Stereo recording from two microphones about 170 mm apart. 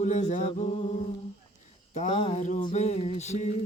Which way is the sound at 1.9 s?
40° left (ahead or behind).